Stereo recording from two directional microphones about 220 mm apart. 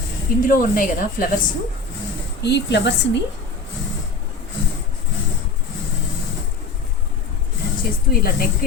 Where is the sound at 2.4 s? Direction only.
50° left (ahead or behind).